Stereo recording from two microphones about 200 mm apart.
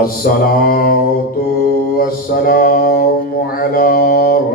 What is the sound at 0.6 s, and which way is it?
Mantra, 45° left (ahead or behind).